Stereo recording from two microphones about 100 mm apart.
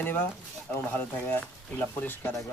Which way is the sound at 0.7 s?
20° left (ahead or behind).